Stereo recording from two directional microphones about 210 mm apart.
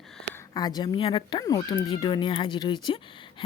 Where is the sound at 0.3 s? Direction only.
20° left (ahead or behind).